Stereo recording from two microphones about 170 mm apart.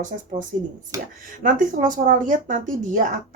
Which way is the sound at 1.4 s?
50° right (ahead or behind).